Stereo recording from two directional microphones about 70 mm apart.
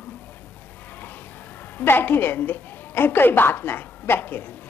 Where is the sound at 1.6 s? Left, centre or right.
Left.